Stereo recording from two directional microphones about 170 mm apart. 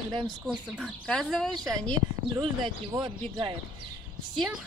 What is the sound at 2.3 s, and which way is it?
Speech, 20° right (ahead or behind).